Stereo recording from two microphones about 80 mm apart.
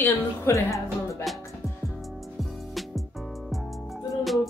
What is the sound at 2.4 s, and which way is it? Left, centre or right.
Music, centre.